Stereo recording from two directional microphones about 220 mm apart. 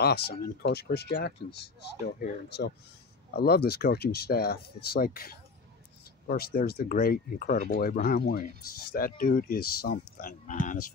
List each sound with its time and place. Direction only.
0.0 s speech: 45° left (ahead or behind)